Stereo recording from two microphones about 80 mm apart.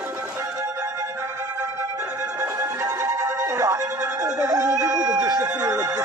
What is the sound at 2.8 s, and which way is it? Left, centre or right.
Music, right.